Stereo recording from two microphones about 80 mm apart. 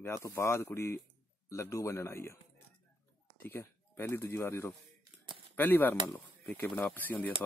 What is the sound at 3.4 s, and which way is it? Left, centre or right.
Speech, left.